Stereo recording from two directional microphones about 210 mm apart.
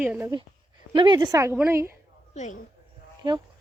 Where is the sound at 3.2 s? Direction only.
20° right (ahead or behind).